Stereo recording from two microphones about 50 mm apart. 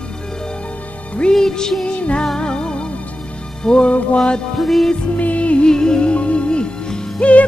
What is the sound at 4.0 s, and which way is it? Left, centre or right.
Speech, left.